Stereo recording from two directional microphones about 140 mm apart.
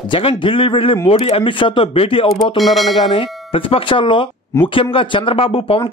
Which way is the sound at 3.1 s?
40° left (ahead or behind).